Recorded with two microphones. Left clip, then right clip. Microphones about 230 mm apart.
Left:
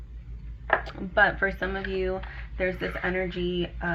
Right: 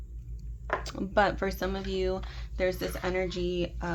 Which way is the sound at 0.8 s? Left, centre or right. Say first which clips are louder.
Left 1 dB; right.